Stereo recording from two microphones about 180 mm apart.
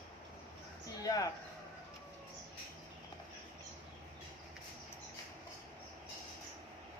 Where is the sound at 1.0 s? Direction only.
20° left (ahead or behind).